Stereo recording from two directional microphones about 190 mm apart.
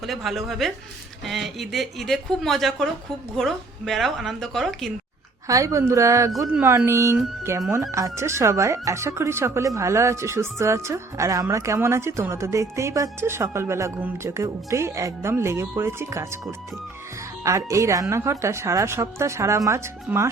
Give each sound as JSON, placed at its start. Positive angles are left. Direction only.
{"t": 0.1, "sound": "a woman's voice", "side_deg": 0}
{"t": 5.5, "sound": "speech", "side_deg": -15}
{"t": 17.4, "sound": "speech", "side_deg": -15}